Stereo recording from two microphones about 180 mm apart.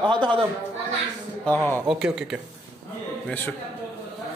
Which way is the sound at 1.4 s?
10° left (ahead or behind).